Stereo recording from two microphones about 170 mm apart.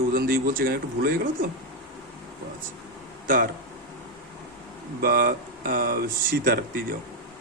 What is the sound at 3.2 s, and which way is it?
Speech, 55° right (ahead or behind).